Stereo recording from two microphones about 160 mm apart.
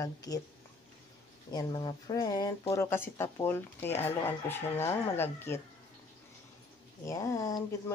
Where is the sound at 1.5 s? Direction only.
25° left (ahead or behind).